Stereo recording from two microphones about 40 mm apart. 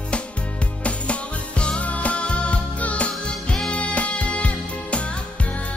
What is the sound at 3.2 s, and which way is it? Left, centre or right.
Music, left.